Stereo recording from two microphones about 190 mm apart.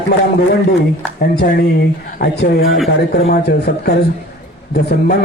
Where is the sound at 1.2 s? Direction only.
50° left (ahead or behind).